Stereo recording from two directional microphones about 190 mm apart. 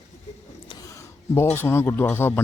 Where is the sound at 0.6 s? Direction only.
20° left (ahead or behind).